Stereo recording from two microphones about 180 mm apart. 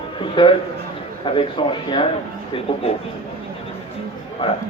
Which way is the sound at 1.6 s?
25° left (ahead or behind).